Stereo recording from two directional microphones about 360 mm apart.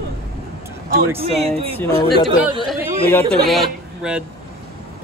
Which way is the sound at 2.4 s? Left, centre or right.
Centre.